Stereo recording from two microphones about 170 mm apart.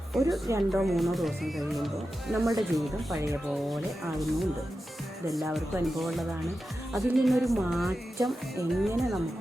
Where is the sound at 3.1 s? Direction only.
20° right (ahead or behind).